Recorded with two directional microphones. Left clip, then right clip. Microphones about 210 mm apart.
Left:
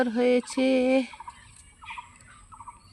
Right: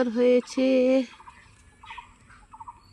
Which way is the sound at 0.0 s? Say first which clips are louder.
Right 2 dB; 10° left (ahead or behind).